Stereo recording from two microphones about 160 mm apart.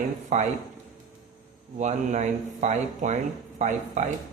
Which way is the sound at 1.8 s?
50° right (ahead or behind).